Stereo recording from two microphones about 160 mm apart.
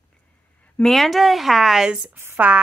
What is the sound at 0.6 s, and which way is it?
Speech, 10° left (ahead or behind).